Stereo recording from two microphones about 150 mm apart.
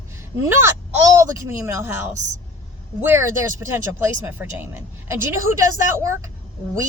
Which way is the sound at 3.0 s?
15° right (ahead or behind).